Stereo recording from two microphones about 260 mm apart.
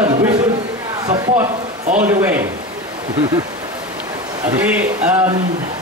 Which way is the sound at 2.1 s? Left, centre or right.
Centre.